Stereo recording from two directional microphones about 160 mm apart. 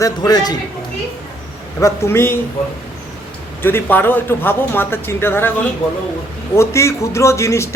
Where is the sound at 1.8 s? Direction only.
15° left (ahead or behind).